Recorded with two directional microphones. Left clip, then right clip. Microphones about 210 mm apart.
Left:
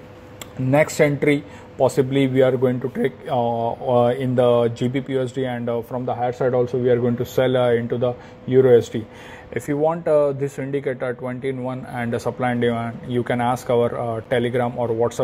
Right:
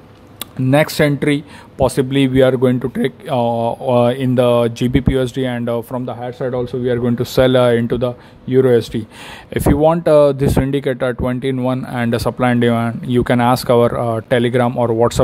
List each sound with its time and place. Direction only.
0.7 s a man's voice: 25° right (ahead or behind)
9.5 s speech: 40° right (ahead or behind)